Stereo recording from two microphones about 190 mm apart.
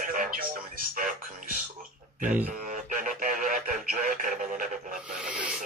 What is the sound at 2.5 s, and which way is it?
Radio, 45° right (ahead or behind).